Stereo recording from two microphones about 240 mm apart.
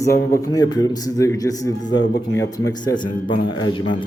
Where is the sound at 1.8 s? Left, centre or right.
Left.